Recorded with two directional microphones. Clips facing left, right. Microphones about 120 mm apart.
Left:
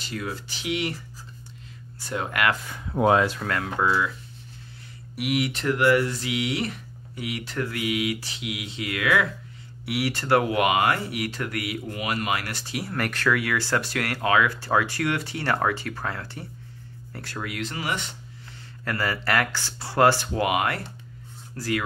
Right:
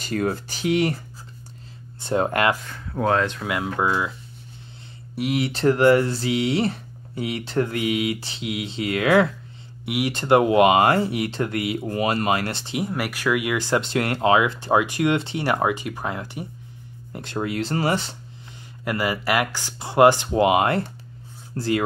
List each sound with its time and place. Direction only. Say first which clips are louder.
0.0 s speech: right 8 dB; 45° right (ahead or behind)
2.1 s speech: right 5 dB; 35° right (ahead or behind)
2.6 s speech: left 2 dB; 15° left (ahead or behind)
3.4 s speech: right 1 dB; 15° right (ahead or behind)
5.1 s speech: right 2 dB; 30° right (ahead or behind)
12.9 s speech: even; 10° right (ahead or behind); by 18.1 s 35° right (ahead or behind)
18.9 s speech: right 3 dB; 15° right (ahead or behind)